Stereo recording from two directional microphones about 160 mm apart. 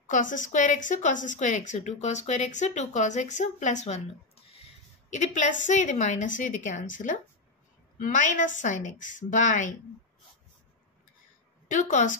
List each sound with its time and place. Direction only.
0.0 s a woman's voice: 55° left (ahead or behind)
11.7 s a woman's voice: 50° left (ahead or behind)